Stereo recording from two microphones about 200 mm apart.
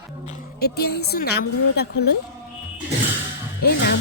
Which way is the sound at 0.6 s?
55° left (ahead or behind).